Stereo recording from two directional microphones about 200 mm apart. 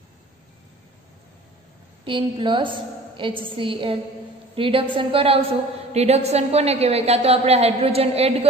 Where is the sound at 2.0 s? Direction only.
25° right (ahead or behind).